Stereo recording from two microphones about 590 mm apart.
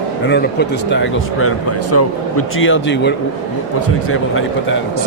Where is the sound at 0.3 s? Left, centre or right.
Centre.